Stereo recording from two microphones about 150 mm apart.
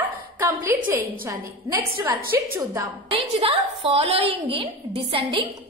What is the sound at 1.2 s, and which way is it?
A woman's voice, 20° right (ahead or behind).